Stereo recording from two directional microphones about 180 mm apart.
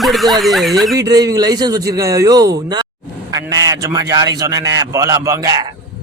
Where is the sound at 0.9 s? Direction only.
20° right (ahead or behind).